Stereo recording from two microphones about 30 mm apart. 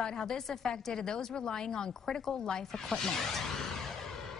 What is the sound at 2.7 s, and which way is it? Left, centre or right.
Music, centre.